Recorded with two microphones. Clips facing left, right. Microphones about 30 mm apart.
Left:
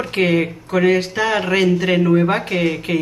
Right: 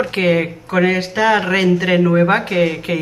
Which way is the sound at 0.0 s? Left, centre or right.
Centre.